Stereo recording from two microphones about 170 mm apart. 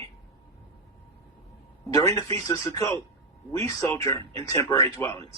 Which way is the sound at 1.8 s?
20° left (ahead or behind).